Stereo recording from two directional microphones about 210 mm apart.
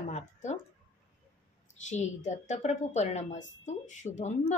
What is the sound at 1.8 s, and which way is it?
A woman's voice, 35° left (ahead or behind).